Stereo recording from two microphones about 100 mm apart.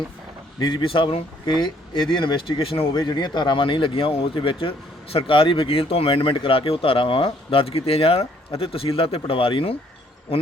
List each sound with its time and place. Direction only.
0.6 s speech: 60° left (ahead or behind)
2.9 s speech: 45° left (ahead or behind); by 9.7 s 65° left (ahead or behind)